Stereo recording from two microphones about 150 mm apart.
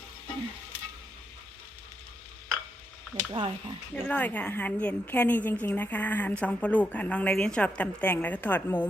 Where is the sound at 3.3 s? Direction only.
35° right (ahead or behind).